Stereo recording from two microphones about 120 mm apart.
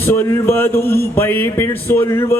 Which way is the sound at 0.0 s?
20° left (ahead or behind).